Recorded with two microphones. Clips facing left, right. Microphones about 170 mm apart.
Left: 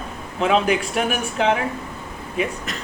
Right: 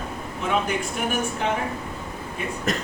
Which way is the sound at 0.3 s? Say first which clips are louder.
Left 6 dB; 90° left.